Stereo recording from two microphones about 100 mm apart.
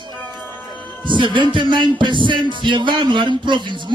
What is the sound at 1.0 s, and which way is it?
A man's voice, 55° right (ahead or behind).